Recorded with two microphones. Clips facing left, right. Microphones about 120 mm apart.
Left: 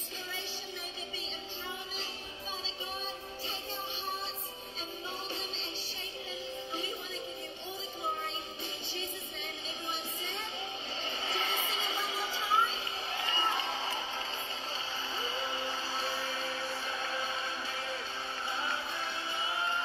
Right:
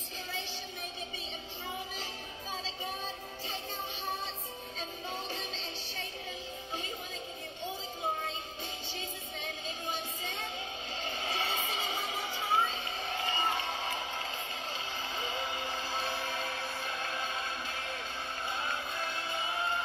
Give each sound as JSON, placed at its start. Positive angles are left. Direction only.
{"t": 11.6, "sound": "music", "side_deg": -50}
{"t": 15.1, "sound": "music", "side_deg": -50}